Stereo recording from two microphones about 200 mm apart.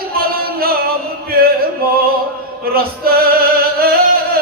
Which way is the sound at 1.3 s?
50° right (ahead or behind).